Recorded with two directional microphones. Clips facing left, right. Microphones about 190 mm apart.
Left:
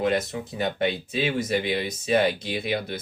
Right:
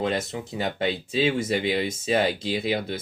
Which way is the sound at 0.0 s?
25° right (ahead or behind).